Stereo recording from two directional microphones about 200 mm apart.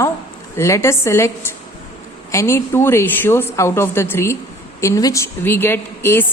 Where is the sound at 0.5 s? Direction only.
15° left (ahead or behind).